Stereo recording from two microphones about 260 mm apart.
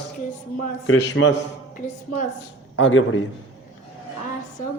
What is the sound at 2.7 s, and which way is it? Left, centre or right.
Speech, left.